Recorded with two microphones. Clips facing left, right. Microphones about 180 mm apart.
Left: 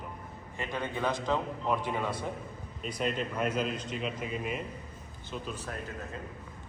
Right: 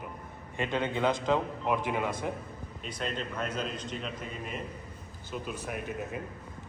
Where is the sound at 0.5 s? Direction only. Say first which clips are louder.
Right 4 dB; 20° right (ahead or behind).